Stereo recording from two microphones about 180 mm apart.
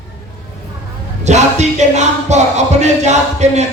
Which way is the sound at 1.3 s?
40° right (ahead or behind).